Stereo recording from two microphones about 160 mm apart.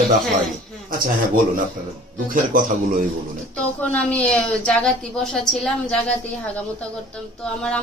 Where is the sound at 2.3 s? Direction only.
60° right (ahead or behind).